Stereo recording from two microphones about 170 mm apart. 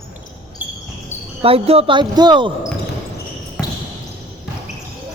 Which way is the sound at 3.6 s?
10° left (ahead or behind).